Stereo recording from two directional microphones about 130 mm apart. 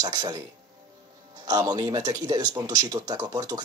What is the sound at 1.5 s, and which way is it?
Speech, 30° right (ahead or behind).